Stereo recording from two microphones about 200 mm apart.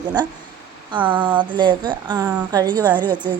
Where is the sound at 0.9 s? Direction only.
25° right (ahead or behind).